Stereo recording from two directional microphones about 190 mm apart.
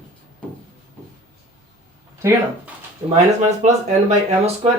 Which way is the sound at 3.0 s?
30° right (ahead or behind).